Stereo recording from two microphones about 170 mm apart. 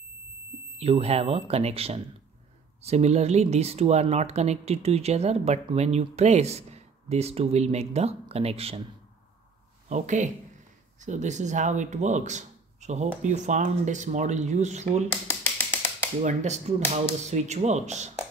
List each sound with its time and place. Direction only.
0.7 s speech: 35° right (ahead or behind)
9.8 s speech: 45° right (ahead or behind)
15.5 s finger snapping: 15° left (ahead or behind)
16.2 s speech: 45° right (ahead or behind)